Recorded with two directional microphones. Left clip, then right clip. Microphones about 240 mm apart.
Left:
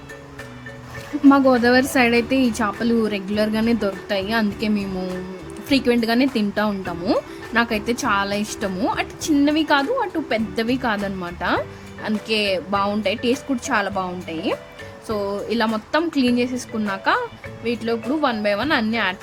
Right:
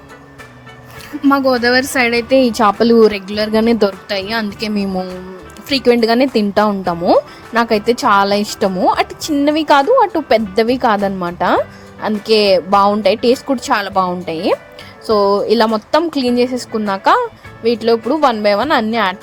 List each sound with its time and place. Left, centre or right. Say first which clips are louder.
1.5 s a woman's voice: right 3 dB; right